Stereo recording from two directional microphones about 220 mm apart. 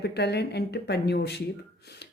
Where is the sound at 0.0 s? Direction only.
50° left (ahead or behind).